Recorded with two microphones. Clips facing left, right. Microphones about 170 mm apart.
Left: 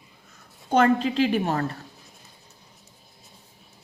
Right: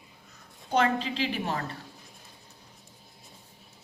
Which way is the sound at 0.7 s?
50° left (ahead or behind).